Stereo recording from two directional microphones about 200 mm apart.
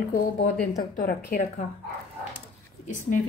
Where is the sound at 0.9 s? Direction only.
45° left (ahead or behind).